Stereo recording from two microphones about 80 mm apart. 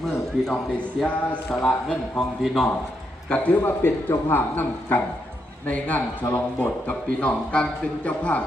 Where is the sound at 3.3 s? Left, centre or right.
Centre.